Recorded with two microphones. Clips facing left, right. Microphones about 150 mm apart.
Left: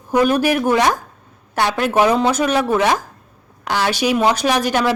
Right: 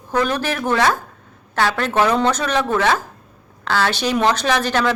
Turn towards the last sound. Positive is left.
turn(degrees=10)  # may be behind; listen again after turning